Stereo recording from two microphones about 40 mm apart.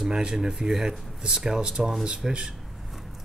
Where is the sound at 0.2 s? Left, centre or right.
Centre.